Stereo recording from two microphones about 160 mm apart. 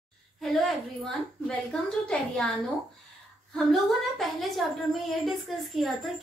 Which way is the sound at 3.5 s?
Centre (ahead or behind).